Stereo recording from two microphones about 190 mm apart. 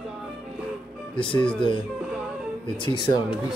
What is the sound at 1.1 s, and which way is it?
Speech, 25° left (ahead or behind).